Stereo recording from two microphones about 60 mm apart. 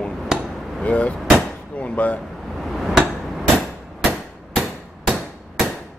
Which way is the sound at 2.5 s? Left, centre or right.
Centre.